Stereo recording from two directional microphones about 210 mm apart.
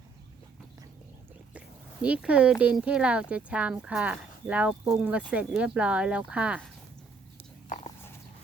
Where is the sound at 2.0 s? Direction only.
5° right (ahead or behind).